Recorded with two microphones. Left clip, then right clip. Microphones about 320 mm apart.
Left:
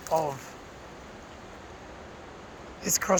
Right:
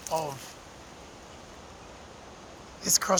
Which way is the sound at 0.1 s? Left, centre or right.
Centre.